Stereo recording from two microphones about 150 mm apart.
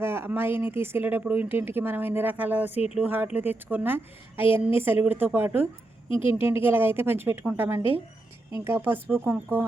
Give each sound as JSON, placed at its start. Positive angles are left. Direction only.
{"t": 0.0, "sound": "speech", "side_deg": -15}
{"t": 6.1, "sound": "speech", "side_deg": 35}
{"t": 6.3, "sound": "speech", "side_deg": -15}